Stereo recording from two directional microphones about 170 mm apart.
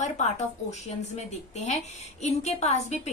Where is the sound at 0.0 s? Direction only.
40° left (ahead or behind).